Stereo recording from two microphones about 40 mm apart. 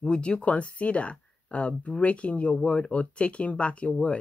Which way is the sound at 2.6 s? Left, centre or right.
Left.